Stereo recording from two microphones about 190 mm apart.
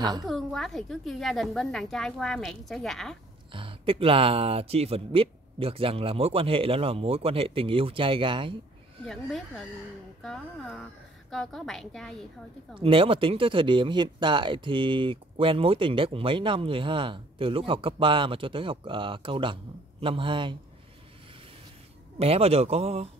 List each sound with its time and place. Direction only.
0.0 s speech: 20° right (ahead or behind)
0.3 s a woman's voice: centre (ahead or behind)
3.5 s speech: 30° right (ahead or behind)
9.0 s a woman's voice: centre (ahead or behind)
12.7 s speech: 30° right (ahead or behind)
22.2 s a man's voice: 30° right (ahead or behind)